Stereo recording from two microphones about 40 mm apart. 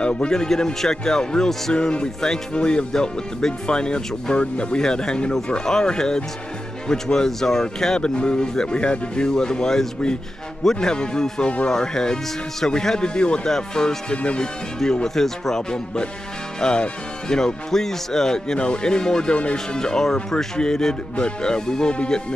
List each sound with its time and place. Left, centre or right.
0.0 s speech: left
0.3 s speech: centre
11.7 s speech: centre
14.1 s speech: left
15.1 s speech: centre
16.6 s music: left
17.6 s speech: centre